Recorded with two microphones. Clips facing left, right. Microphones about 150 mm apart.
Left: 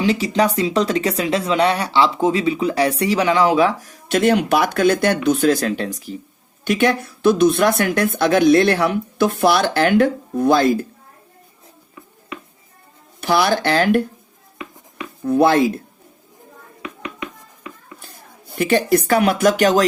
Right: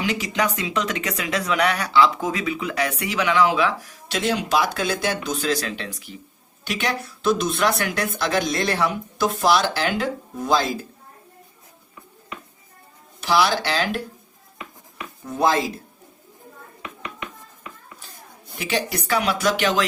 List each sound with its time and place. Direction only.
0.0 s speech: 30° left (ahead or behind)
6.7 s speech: 50° left (ahead or behind)
13.2 s speech: 55° left (ahead or behind)
15.2 s speech: 65° left (ahead or behind)
18.5 s speech: 50° left (ahead or behind)